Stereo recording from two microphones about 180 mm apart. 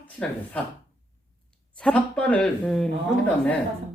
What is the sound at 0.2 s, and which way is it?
Speech, 10° left (ahead or behind).